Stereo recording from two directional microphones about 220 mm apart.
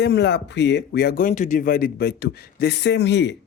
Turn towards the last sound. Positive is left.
turn(degrees=50)  # may be behind; listen again after turning